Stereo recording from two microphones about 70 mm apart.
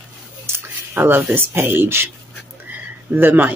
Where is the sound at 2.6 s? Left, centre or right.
Right.